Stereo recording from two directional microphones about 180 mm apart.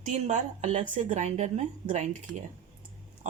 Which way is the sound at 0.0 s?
40° right (ahead or behind).